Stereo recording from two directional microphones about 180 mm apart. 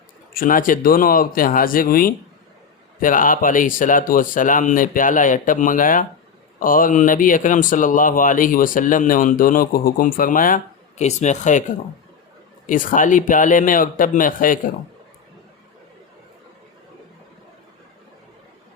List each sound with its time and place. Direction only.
0.3 s speech: 50° left (ahead or behind)
12.6 s speech: 45° left (ahead or behind)